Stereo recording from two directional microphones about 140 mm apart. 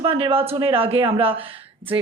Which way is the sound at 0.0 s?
40° right (ahead or behind).